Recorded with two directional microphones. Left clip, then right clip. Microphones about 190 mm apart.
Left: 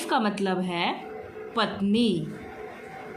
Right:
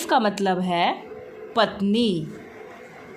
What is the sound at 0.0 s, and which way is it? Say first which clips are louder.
Speech: right 5 dB; 30° right (ahead or behind).